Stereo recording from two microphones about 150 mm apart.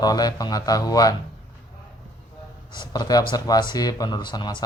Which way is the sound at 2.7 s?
25° left (ahead or behind).